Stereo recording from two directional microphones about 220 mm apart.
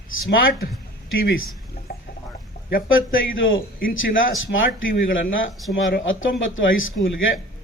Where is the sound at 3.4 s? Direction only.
60° left (ahead or behind).